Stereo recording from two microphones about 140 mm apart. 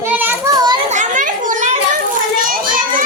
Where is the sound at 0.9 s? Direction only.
60° right (ahead or behind).